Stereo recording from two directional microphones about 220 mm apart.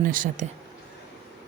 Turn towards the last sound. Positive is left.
turn(degrees=-40)  # may be behind; listen again after turning